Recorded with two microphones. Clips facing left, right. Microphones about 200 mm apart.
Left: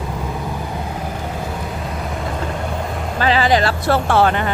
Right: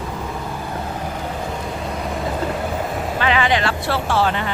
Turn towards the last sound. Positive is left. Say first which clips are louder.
# left 4 dB
turn(degrees=50)  # may be behind; listen again after turning